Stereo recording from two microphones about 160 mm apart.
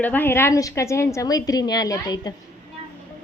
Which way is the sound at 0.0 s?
10° left (ahead or behind).